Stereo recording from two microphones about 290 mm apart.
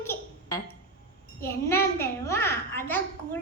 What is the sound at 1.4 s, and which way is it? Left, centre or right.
A child's voice, centre.